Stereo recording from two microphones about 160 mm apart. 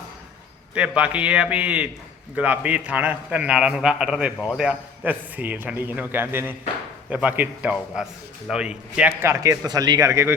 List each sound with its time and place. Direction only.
0.7 s a man's voice: 5° right (ahead or behind)